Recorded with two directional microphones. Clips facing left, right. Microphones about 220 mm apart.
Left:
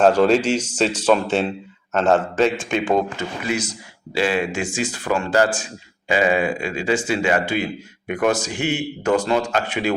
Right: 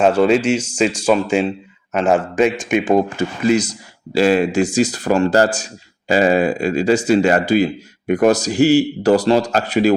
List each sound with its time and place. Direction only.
0.0 s speech: 5° right (ahead or behind)
3.2 s speech: 40° right (ahead or behind)